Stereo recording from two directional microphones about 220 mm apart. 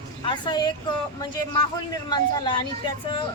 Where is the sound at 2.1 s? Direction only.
20° left (ahead or behind).